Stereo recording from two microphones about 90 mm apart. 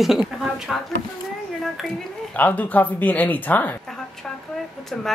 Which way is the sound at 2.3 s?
20° left (ahead or behind).